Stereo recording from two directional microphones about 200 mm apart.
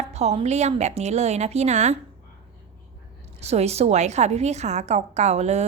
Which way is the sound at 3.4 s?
30° right (ahead or behind).